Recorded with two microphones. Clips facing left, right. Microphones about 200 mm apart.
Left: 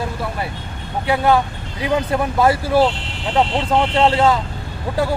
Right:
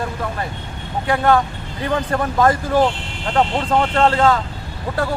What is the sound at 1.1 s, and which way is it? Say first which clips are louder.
Speech: even; 10° left (ahead or behind).